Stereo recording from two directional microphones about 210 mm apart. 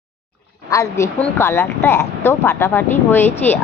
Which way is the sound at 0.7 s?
15° left (ahead or behind).